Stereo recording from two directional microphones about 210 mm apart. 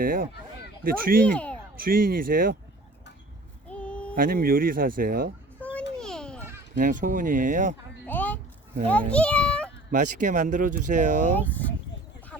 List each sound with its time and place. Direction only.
0.0 s speech: 40° right (ahead or behind)
1.2 s speech: 5° left (ahead or behind)
1.7 s speech: 45° right (ahead or behind)
3.7 s a sound: 5° left (ahead or behind)
4.1 s speech: 45° right (ahead or behind)
6.0 s children playing: 5° left (ahead or behind)
6.7 s speech: 40° right (ahead or behind)
8.0 s a sound: 10° left (ahead or behind)
8.9 s a child's voice: 5° left (ahead or behind)
9.9 s speech: 40° right (ahead or behind)
11.3 s speech: 10° left (ahead or behind)
12.3 s a sound: 5° left (ahead or behind)